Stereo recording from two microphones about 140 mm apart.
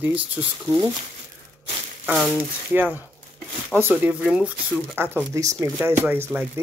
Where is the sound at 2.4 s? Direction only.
15° right (ahead or behind).